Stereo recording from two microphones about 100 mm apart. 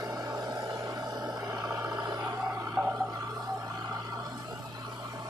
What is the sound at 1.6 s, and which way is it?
Vehicle, 20° right (ahead or behind).